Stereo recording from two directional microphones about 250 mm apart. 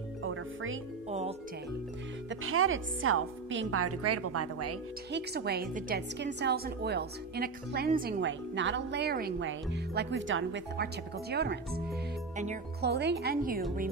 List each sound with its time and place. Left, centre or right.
0.2 s music: right
2.2 s speech: right
5.1 s a woman's voice: right
12.8 s a woman's voice: right